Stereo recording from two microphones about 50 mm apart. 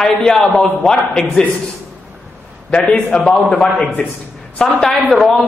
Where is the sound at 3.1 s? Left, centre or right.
Centre.